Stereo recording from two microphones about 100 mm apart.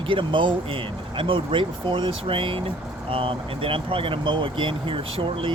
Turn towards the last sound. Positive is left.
turn(degrees=-60)  # may be behind; listen again after turning